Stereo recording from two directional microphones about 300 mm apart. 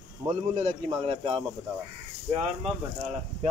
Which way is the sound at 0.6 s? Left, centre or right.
Right.